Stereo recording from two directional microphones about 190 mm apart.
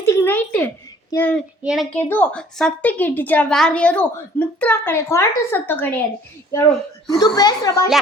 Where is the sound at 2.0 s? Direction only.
10° left (ahead or behind).